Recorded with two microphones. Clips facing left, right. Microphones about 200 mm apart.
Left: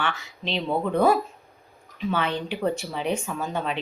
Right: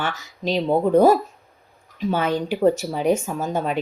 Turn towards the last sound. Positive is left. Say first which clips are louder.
# right 4 dB
turn(degrees=-40)  # may be behind; listen again after turning